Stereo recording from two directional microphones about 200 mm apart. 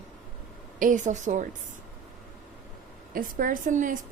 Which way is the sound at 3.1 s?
45° right (ahead or behind).